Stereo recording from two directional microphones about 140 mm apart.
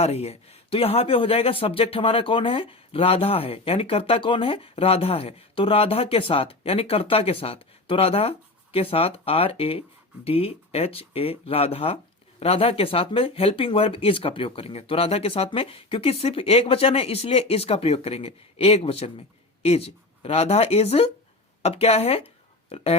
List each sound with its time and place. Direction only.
0.0 s speech: 45° left (ahead or behind)